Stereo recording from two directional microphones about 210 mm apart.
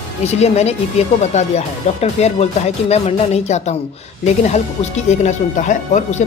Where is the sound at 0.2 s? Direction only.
30° left (ahead or behind).